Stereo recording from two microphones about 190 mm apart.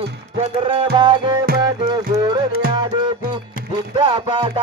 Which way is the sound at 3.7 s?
25° right (ahead or behind).